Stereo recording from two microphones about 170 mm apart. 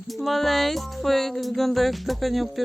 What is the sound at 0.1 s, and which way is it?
Music, centre (ahead or behind).